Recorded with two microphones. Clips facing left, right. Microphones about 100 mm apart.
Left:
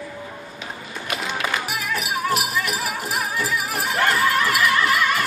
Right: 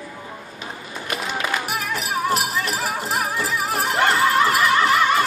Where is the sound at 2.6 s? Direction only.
25° right (ahead or behind).